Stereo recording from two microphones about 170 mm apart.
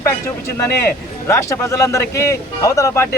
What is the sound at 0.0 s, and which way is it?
Speech, 15° left (ahead or behind).